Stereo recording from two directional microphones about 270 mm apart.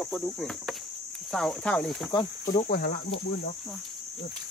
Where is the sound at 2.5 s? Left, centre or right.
Left.